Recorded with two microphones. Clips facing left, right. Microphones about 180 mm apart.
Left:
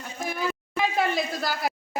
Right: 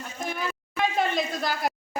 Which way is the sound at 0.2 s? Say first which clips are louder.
Left 2 dB; 5° left (ahead or behind).